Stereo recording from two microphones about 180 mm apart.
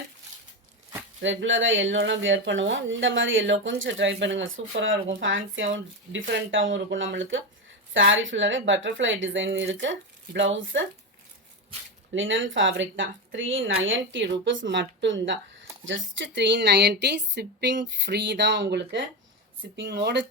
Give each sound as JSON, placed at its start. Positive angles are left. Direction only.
{"t": 1.2, "sound": "speech", "side_deg": -90}
{"t": 12.1, "sound": "speech", "side_deg": -90}